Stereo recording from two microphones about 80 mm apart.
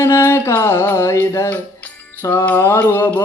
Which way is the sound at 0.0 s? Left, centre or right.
Left.